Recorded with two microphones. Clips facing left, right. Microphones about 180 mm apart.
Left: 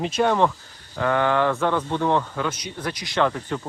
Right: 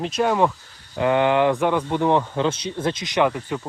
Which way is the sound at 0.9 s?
20° right (ahead or behind).